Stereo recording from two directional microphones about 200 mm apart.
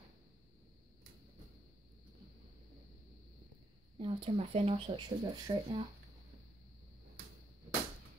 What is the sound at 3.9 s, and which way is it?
Speech, 25° right (ahead or behind).